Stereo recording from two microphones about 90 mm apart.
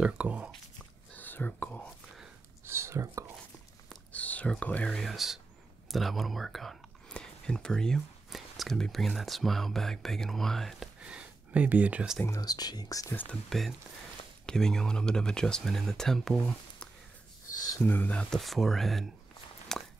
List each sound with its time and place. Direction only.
0.0 s speech: 15° right (ahead or behind)
1.1 s whispering: 20° left (ahead or behind)
2.6 s whispering: 30° right (ahead or behind)
4.1 s speech: 15° left (ahead or behind)
5.1 s speech: 5° right (ahead or behind)
11.0 s a sound: 10° right (ahead or behind)
12.4 s speech: 45° left (ahead or behind)
13.1 s speech: 20° left (ahead or behind)
13.5 s speech: centre (ahead or behind); by 18.2 s 20° left (ahead or behind)
18.3 s speech: centre (ahead or behind)
19.7 s a sound: 5° left (ahead or behind)